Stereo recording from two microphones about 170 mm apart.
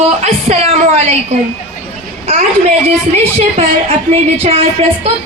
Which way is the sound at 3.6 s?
35° right (ahead or behind).